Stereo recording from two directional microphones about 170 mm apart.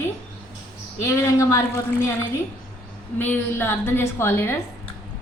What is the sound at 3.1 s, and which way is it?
A woman's voice, 10° left (ahead or behind).